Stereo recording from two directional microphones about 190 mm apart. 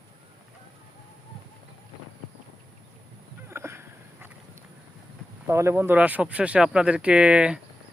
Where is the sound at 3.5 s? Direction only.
15° right (ahead or behind).